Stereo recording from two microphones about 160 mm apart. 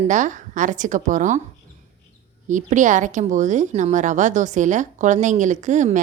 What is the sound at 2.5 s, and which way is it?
A woman's voice, 50° right (ahead or behind).